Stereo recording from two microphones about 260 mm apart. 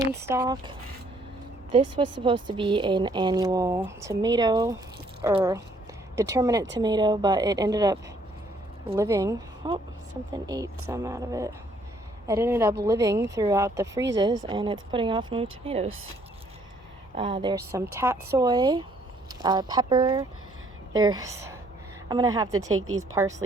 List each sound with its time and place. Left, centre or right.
0.2 s speech: centre
2.2 s speech: centre
17.2 s speech: centre